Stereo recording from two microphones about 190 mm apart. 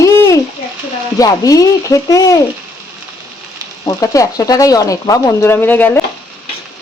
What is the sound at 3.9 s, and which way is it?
Speech, 20° left (ahead or behind).